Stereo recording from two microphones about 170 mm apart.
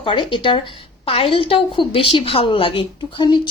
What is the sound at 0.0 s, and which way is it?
A woman's voice, 30° left (ahead or behind).